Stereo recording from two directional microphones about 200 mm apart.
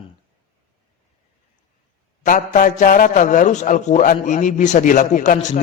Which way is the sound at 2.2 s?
40° left (ahead or behind).